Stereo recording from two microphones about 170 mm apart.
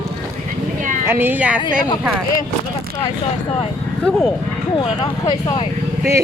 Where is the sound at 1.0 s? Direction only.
10° right (ahead or behind).